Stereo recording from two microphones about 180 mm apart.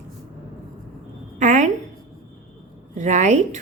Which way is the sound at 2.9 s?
40° right (ahead or behind).